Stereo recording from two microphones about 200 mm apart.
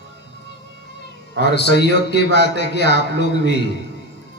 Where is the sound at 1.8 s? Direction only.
55° left (ahead or behind).